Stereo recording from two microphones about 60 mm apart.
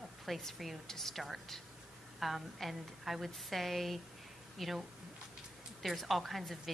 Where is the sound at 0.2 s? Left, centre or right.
Centre.